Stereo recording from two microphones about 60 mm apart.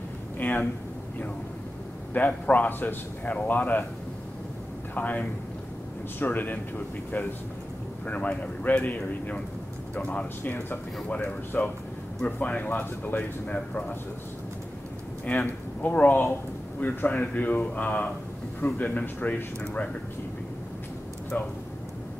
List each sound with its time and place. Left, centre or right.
0.4 s speech: left
2.1 s a man's voice: left
4.9 s a man's voice: left
8.1 s a man's voice: left
15.2 s a man's voice: left